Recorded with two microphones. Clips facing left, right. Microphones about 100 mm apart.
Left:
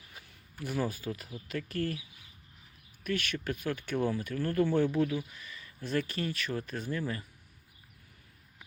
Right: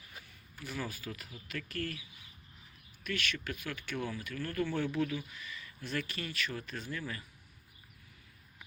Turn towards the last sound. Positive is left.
turn(degrees=30)  # may be behind; listen again after turning